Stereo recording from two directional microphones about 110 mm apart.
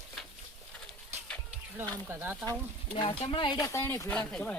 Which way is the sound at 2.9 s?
55° left (ahead or behind).